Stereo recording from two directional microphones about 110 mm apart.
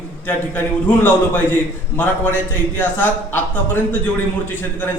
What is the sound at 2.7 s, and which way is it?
Speech, 20° left (ahead or behind).